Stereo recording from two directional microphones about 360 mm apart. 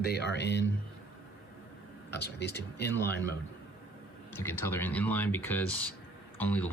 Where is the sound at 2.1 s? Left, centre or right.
Left.